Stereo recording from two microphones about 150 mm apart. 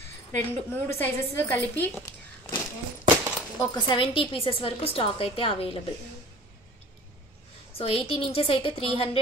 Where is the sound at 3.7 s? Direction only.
30° left (ahead or behind).